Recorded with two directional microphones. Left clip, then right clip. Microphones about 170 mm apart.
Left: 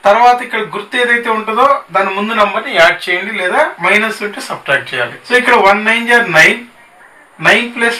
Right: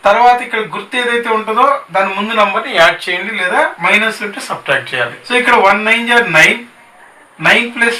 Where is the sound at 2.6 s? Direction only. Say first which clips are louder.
Left 1 dB; 20° right (ahead or behind).